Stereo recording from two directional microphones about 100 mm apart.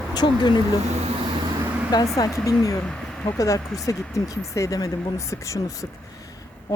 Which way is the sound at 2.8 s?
5° left (ahead or behind).